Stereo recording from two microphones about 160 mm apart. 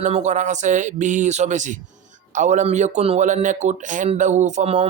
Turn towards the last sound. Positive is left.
turn(degrees=-45)  # may be behind; listen again after turning